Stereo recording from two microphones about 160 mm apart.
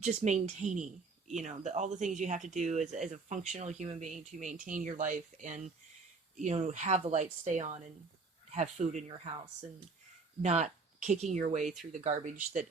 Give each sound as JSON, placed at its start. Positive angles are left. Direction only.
{"t": 0.0, "sound": "speech", "side_deg": -45}
{"t": 10.4, "sound": "speech", "side_deg": -45}